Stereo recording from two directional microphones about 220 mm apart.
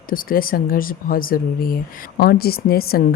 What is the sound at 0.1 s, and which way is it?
Speech, 40° left (ahead or behind).